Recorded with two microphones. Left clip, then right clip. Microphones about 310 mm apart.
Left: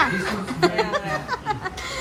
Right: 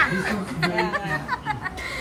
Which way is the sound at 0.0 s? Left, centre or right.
Centre.